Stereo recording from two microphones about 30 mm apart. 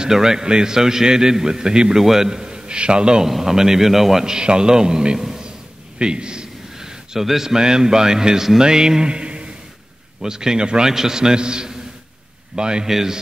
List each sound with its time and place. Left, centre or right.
0.1 s a man's voice: centre
3.3 s a man's voice: centre
4.3 s a man's voice: right
6.8 s a man's voice: centre; by 9.5 s right
10.2 s a man's voice: right
12.8 s a man's voice: centre